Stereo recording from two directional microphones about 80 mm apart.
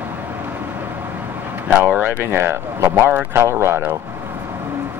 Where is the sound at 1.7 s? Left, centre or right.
Centre.